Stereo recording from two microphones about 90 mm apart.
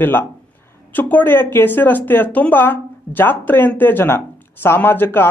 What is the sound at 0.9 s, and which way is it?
Speech, 20° left (ahead or behind).